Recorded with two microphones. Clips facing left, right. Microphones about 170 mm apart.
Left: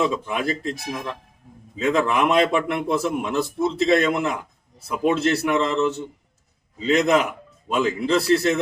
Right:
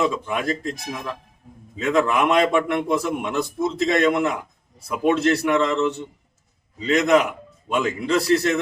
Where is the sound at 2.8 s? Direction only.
30° left (ahead or behind).